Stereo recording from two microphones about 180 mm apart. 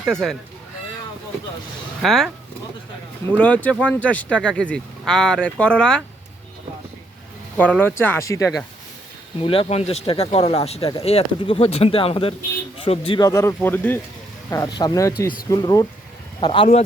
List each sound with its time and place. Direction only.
0.0 s speech: centre (ahead or behind)
2.0 s speech: centre (ahead or behind)
3.3 s speech: 10° left (ahead or behind)
7.5 s speech: 10° left (ahead or behind)
9.4 s speech: 30° left (ahead or behind)